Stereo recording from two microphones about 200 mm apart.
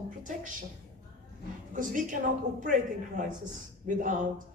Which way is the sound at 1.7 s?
40° right (ahead or behind).